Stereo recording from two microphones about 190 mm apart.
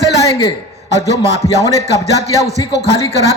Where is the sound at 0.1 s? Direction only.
20° left (ahead or behind).